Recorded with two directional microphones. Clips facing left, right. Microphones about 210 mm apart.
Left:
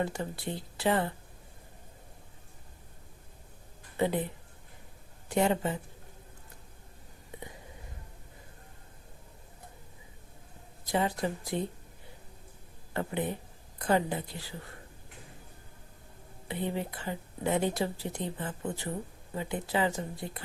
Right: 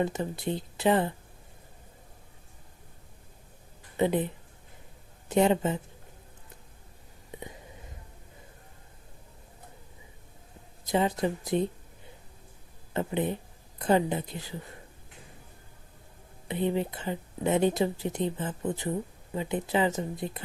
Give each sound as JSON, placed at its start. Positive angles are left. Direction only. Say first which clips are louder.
{"t": 0.0, "sound": "speech", "louder": "right 4 dB", "side_deg": -20}
{"t": 3.9, "sound": "a woman's voice", "louder": "right 3 dB", "side_deg": -20}
{"t": 5.3, "sound": "speech", "louder": "right 4 dB", "side_deg": -20}
{"t": 10.8, "sound": "speech", "louder": "right 3 dB", "side_deg": -20}
{"t": 12.9, "sound": "speech", "louder": "right 4 dB", "side_deg": -20}
{"t": 16.5, "sound": "speech", "louder": "right 5 dB", "side_deg": -20}